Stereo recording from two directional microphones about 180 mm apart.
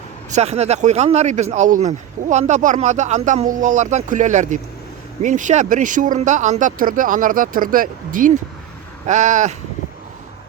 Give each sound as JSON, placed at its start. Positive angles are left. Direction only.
{"t": 0.3, "sound": "speech", "side_deg": -40}